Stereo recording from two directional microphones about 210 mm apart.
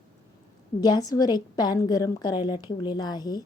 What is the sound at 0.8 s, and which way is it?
A woman's voice, 15° left (ahead or behind).